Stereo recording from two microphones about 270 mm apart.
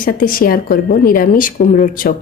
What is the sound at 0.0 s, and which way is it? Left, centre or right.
A woman's voice, left.